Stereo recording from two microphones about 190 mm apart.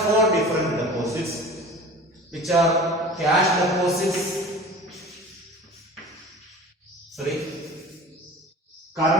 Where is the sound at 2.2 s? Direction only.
Centre (ahead or behind).